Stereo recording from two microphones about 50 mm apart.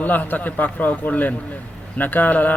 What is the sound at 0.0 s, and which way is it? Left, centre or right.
A man's voice, left.